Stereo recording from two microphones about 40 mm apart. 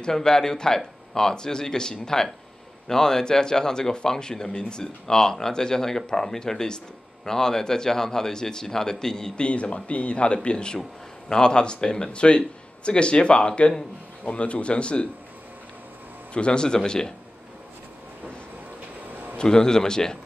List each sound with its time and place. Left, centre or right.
0.0 s speech: centre
9.4 s speech: left
16.3 s speech: left
19.3 s speech: centre